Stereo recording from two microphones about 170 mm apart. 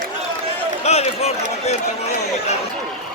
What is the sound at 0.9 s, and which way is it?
Speech, 40° left (ahead or behind).